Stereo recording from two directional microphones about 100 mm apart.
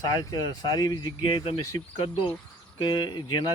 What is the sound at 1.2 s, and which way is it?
Speech, 55° left (ahead or behind).